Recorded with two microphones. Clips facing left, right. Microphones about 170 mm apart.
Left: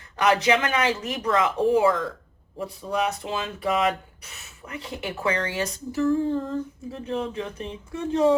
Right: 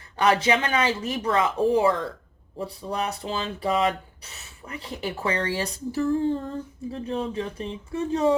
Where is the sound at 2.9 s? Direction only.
35° right (ahead or behind).